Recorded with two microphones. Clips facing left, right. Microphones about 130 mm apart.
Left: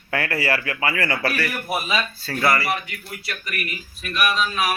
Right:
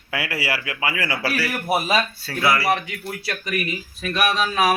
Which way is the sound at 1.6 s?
35° right (ahead or behind).